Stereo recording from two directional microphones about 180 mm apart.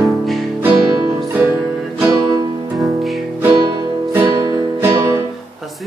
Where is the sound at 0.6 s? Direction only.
15° right (ahead or behind).